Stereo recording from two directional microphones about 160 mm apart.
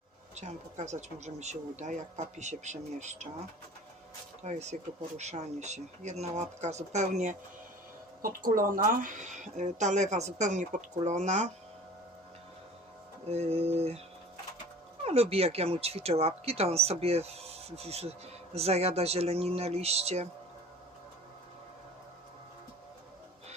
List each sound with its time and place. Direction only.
0.3 s speech: 45° right (ahead or behind)
4.4 s speech: 45° right (ahead or behind)
8.4 s speech: 60° right (ahead or behind)
13.2 s speech: 40° right (ahead or behind)
15.0 s speech: 40° right (ahead or behind)